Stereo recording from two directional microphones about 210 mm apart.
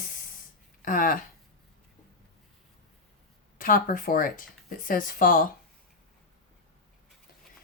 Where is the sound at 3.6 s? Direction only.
40° left (ahead or behind).